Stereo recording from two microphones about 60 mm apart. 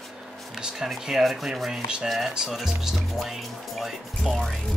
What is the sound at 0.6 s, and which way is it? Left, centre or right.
Speech, centre.